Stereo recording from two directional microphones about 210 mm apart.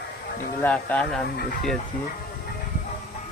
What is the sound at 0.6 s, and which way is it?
Speech, 5° left (ahead or behind).